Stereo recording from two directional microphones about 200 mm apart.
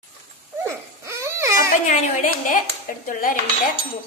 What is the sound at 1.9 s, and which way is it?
A woman's voice, 40° left (ahead or behind).